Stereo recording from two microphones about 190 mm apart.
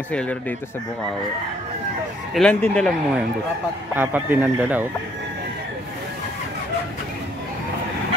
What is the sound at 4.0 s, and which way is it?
Speech, 10° right (ahead or behind).